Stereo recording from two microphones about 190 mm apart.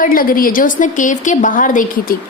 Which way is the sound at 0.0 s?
50° left (ahead or behind).